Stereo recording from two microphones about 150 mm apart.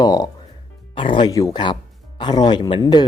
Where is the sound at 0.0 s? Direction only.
25° left (ahead or behind).